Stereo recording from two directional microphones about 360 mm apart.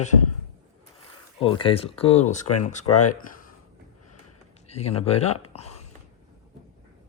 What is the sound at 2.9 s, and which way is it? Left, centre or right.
Speech, left.